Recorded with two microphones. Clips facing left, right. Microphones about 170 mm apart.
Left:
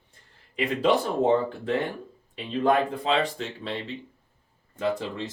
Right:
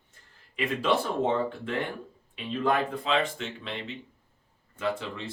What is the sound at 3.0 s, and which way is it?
Speech, 35° left (ahead or behind).